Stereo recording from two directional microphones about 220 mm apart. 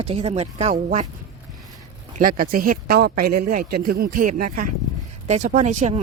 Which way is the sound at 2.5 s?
40° right (ahead or behind).